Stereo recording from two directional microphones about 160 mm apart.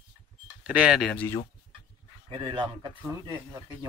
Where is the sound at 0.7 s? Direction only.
5° right (ahead or behind); by 1.4 s 10° left (ahead or behind).